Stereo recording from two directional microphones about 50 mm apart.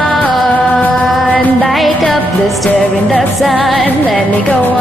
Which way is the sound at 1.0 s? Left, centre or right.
Centre.